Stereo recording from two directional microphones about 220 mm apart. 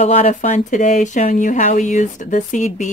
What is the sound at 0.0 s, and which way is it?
Speech, 30° left (ahead or behind).